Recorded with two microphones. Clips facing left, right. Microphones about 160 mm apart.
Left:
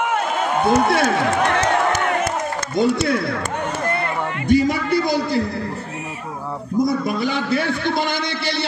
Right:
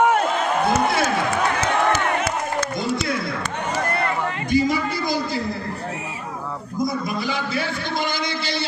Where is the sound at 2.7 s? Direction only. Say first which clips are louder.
Left 6 dB; 65° left (ahead or behind).